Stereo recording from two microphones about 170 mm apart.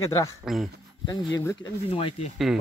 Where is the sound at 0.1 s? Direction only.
20° left (ahead or behind).